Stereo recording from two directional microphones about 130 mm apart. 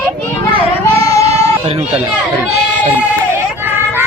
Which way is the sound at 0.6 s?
50° right (ahead or behind).